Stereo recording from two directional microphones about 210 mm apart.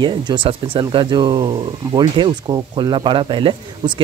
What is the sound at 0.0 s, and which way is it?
Speech, 20° right (ahead or behind).